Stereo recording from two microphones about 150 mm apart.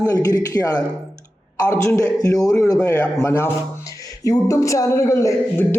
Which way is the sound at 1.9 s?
25° left (ahead or behind).